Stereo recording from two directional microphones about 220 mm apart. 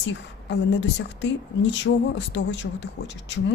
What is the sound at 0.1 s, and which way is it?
Speech, 55° left (ahead or behind).